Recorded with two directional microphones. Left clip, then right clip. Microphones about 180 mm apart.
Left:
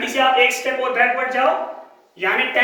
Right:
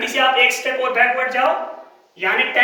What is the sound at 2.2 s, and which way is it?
Speech, 10° right (ahead or behind).